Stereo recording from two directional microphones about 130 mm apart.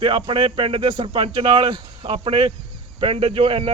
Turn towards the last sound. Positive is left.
turn(degrees=-45)  # may be behind; listen again after turning